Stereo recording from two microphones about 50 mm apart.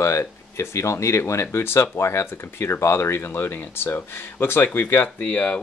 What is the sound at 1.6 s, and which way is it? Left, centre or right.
Speech, left.